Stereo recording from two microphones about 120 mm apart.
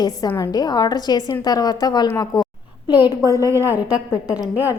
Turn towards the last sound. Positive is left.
turn(degrees=-15)  # may be behind; listen again after turning